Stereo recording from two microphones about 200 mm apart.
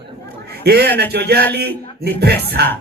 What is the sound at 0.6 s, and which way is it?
A man's voice, 50° right (ahead or behind).